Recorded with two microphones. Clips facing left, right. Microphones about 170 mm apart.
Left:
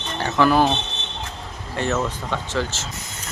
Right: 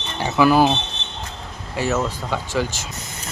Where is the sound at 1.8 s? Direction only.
5° right (ahead or behind).